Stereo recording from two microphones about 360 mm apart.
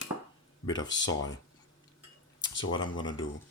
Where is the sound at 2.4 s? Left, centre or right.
Left.